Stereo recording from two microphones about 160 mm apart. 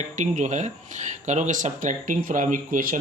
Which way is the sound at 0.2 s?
50° right (ahead or behind).